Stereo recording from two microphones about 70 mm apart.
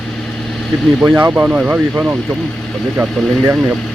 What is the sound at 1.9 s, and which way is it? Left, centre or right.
Speech, right.